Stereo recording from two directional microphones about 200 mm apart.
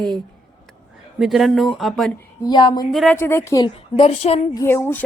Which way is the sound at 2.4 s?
25° left (ahead or behind).